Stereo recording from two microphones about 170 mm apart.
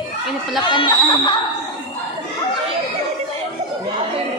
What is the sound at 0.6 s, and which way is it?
Speech, 25° left (ahead or behind).